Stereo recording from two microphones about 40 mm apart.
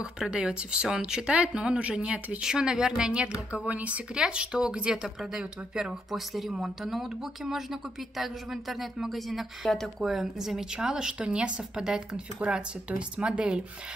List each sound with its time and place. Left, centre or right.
0.2 s a woman's voice: right
1.3 s speech: right
2.4 s a woman's voice: centre
3.7 s speech: right
4.1 s a woman's voice: right
5.0 s speech: centre
8.2 s speech: centre
10.9 s a woman's voice: centre
12.4 s a woman's voice: right